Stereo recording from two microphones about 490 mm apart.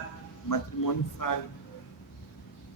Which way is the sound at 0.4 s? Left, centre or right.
Left.